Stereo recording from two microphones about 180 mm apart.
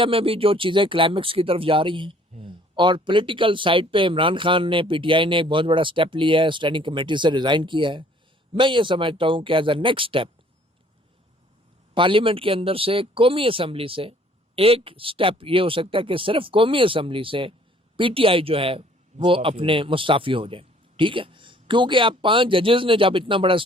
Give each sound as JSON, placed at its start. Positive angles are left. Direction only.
{"t": 0.0, "sound": "speech", "side_deg": -30}
{"t": 11.9, "sound": "speech", "side_deg": -30}